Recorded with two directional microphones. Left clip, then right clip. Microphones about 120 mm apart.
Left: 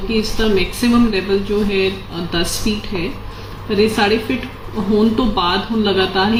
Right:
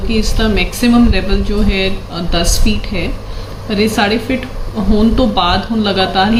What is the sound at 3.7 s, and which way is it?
Speech, 40° right (ahead or behind).